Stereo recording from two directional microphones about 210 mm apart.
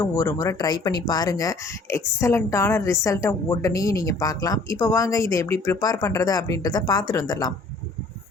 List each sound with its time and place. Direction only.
0.0 s speech: 15° left (ahead or behind)